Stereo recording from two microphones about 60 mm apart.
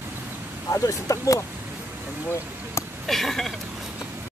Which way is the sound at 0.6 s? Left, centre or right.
Left.